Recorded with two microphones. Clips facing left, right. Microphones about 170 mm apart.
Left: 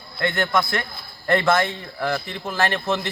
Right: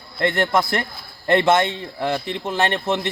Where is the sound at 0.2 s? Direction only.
30° right (ahead or behind).